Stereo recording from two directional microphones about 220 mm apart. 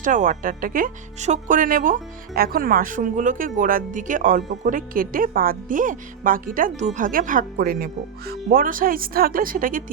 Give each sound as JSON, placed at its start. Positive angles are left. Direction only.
{"t": 0.0, "sound": "a woman's voice", "side_deg": -35}